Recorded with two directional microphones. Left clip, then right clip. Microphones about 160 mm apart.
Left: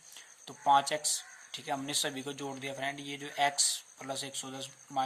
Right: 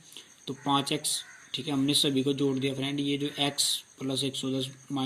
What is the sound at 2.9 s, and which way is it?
Speech, 30° left (ahead or behind).